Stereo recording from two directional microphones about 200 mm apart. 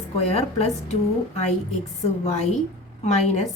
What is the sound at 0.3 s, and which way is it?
Speech, 35° left (ahead or behind).